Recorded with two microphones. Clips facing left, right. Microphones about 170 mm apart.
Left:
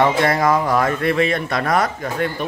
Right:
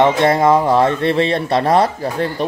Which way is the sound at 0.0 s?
25° right (ahead or behind).